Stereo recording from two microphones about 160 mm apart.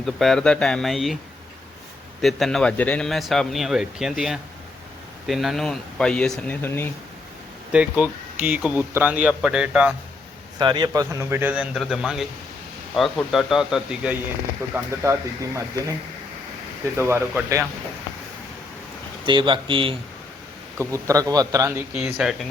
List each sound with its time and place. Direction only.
0.0 s speech: centre (ahead or behind)
2.2 s speech: centre (ahead or behind)
6.6 s speech: 15° left (ahead or behind)
7.7 s speech: 10° right (ahead or behind)
10.6 s speech: 25° right (ahead or behind); by 14.2 s 5° right (ahead or behind)
14.7 s speech: 15° right (ahead or behind)
17.0 s speech: 15° right (ahead or behind)
19.2 s speech: 30° right (ahead or behind)
20.7 s speech: 20° right (ahead or behind)
21.9 s speech: 5° right (ahead or behind)